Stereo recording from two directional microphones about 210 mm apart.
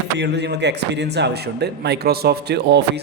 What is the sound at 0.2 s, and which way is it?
A man's voice, 55° right (ahead or behind).